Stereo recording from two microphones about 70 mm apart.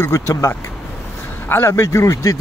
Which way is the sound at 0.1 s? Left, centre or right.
Left.